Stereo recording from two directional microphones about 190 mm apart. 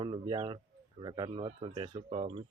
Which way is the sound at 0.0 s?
25° right (ahead or behind).